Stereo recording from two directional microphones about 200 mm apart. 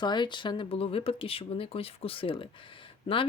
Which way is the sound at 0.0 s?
20° left (ahead or behind).